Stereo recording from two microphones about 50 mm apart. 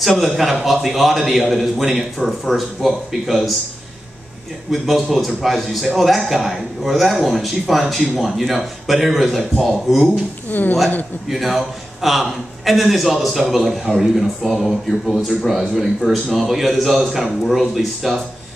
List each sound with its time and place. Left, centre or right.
0.2 s a man's voice: centre
4.6 s a man's voice: centre
10.5 s a woman's voice: left
11.2 s a man's voice: centre
16.3 s a man's voice: centre